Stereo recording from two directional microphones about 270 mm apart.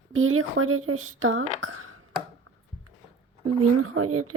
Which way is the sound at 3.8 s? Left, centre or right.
Right.